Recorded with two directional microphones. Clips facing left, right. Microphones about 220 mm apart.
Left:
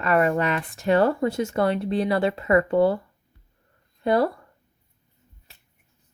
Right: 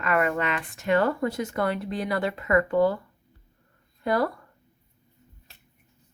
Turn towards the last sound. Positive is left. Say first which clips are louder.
# left 4 dB
turn(degrees=25)  # may be behind; listen again after turning